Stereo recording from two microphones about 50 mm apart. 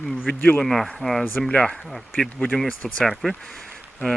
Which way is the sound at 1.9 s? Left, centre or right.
Centre.